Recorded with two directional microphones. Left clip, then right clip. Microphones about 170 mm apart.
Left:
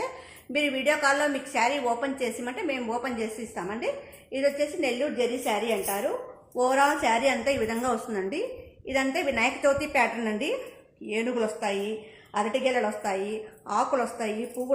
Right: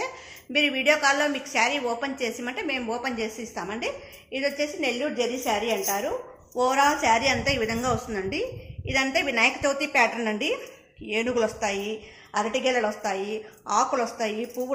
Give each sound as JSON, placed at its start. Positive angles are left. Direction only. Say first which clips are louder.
{"t": 0.5, "sound": "a woman's voice", "louder": "right 3 dB", "side_deg": 20}